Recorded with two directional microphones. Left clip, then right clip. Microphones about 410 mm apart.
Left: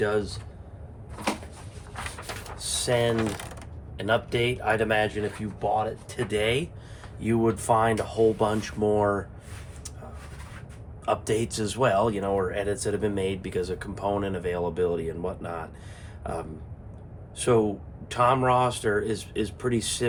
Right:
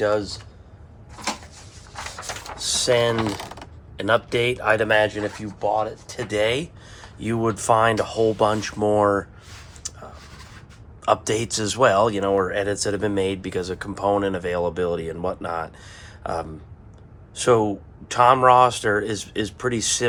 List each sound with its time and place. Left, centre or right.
0.0 s speech: centre
2.2 s a sound: right
3.3 s mechanisms: centre
3.9 s speech: centre
9.8 s a sound: right
11.0 s speech: right